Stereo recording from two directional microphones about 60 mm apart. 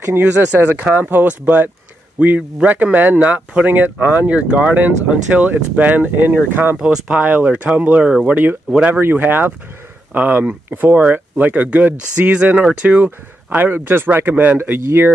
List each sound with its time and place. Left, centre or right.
0.2 s speech: right
9.0 s speech: right
13.6 s speech: right
14.6 s speech: right